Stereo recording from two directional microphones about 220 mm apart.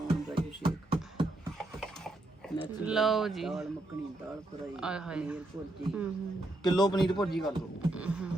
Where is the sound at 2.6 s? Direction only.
5° right (ahead or behind).